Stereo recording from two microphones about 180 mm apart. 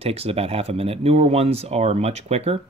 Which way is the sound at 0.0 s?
35° right (ahead or behind).